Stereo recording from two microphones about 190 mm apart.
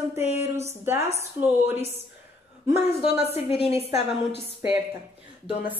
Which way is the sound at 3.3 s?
30° left (ahead or behind).